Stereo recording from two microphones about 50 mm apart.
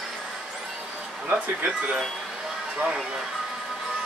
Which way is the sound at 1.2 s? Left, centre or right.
Right.